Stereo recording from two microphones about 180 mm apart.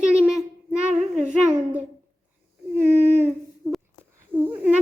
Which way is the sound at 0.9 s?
40° right (ahead or behind).